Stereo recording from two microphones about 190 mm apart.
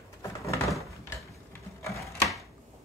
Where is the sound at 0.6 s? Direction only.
Centre (ahead or behind).